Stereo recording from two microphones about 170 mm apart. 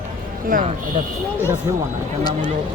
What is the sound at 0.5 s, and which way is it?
Speech, 45° right (ahead or behind).